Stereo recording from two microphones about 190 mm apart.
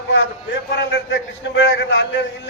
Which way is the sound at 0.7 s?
80° left.